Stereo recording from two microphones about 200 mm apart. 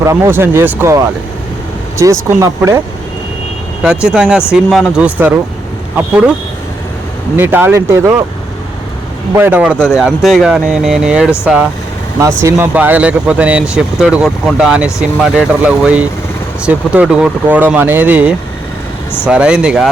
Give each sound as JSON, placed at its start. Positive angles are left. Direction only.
{"t": 0.0, "sound": "speech", "side_deg": -15}
{"t": 3.8, "sound": "speech", "side_deg": -5}
{"t": 7.3, "sound": "speech", "side_deg": -10}
{"t": 9.3, "sound": "speech", "side_deg": -10}
{"t": 12.4, "sound": "speech", "side_deg": -10}